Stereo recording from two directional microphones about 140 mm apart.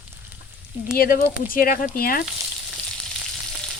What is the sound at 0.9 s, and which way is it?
Speech, 90° left.